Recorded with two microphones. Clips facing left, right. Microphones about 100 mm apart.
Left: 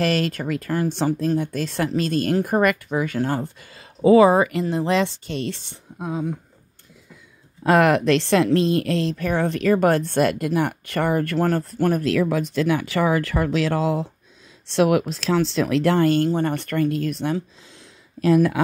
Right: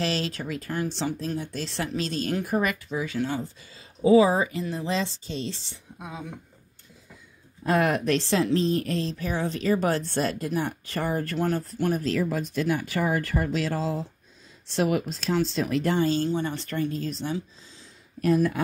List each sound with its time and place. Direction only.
0.0 s speech: 55° left (ahead or behind)
7.6 s speech: 90° left; by 8.5 s 65° left (ahead or behind)
8.5 s a woman's voice: 80° left
18.2 s speech: 90° left